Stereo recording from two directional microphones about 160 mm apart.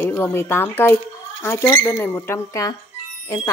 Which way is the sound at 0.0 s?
15° left (ahead or behind).